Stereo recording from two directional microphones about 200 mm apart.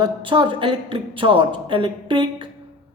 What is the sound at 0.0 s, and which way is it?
A woman's voice, 25° right (ahead or behind).